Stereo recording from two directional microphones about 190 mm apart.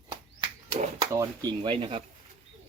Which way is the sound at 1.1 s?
20° right (ahead or behind).